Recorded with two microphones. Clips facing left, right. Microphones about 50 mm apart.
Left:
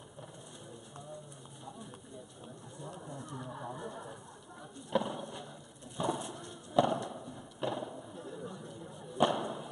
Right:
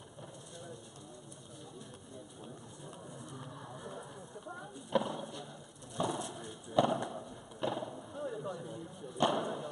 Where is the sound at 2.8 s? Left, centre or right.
Centre.